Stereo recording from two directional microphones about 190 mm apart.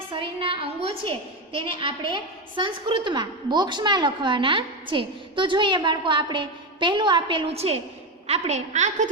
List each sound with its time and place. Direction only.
0.1 s a woman's voice: 25° right (ahead or behind)